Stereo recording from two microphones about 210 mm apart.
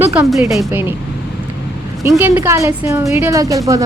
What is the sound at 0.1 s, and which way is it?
Speech, 5° right (ahead or behind).